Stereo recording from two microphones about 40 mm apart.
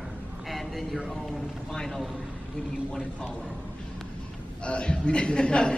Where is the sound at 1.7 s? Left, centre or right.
Centre.